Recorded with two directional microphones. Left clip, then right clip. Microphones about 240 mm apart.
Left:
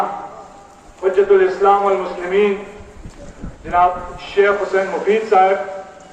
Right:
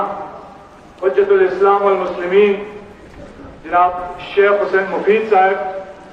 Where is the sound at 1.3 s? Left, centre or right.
Left.